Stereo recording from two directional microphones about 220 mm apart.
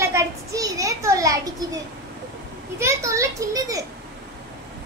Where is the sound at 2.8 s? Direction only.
15° right (ahead or behind).